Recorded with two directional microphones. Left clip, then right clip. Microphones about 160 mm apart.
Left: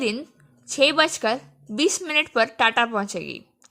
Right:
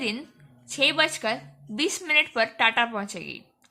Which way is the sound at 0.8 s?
40° left (ahead or behind).